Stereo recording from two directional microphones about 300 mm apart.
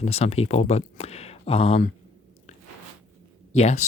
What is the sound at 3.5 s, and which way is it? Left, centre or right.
Speech, left.